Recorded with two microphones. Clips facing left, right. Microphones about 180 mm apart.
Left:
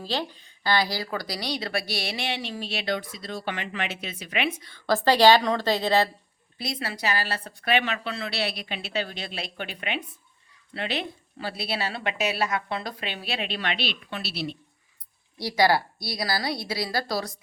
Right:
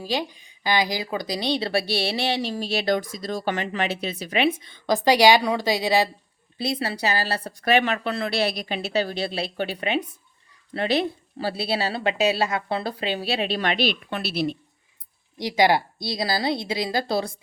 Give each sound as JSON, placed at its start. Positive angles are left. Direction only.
{"t": 0.0, "sound": "speech", "side_deg": -15}
{"t": 4.6, "sound": "a woman's voice", "side_deg": -20}
{"t": 6.6, "sound": "speech", "side_deg": -30}
{"t": 15.4, "sound": "a woman's voice", "side_deg": -20}